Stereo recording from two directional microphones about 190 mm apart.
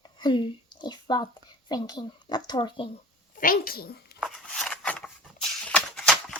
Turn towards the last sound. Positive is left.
turn(degrees=5)  # may be behind; listen again after turning